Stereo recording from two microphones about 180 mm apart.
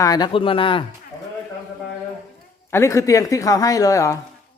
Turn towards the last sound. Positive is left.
turn(degrees=15)  # may be behind; listen again after turning